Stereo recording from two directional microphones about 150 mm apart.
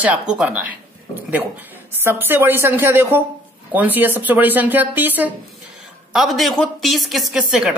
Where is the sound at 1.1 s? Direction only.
10° right (ahead or behind).